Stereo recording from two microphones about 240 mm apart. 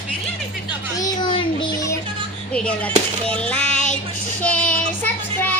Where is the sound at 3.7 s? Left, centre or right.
Left.